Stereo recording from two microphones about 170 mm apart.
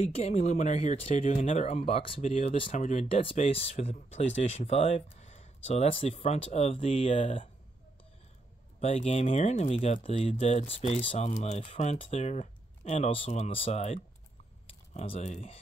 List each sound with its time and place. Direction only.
0.0 s speech: 40° left (ahead or behind)
8.8 s speech: 40° left (ahead or behind)